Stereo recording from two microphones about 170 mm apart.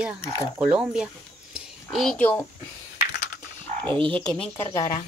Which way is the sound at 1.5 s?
Centre (ahead or behind).